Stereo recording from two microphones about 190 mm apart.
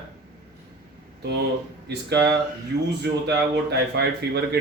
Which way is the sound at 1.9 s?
60° right (ahead or behind).